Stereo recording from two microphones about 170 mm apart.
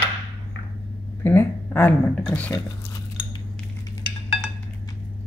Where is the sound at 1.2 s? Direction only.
10° left (ahead or behind).